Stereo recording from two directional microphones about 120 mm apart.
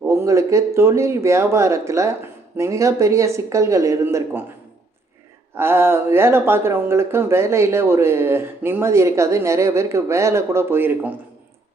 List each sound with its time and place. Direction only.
0.0 s speech: 25° right (ahead or behind)
5.5 s speech: 20° right (ahead or behind)